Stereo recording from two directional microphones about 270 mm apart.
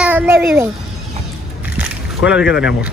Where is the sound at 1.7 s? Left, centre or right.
Centre.